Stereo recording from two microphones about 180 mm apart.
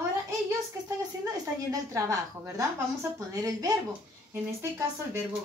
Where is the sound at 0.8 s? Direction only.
20° right (ahead or behind).